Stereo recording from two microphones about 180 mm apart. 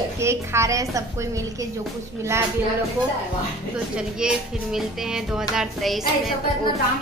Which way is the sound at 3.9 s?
5° right (ahead or behind).